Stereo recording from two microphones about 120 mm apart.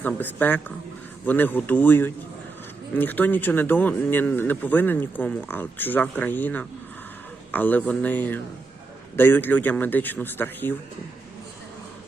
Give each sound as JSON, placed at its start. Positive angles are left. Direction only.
{"t": 0.0, "sound": "speech", "side_deg": 15}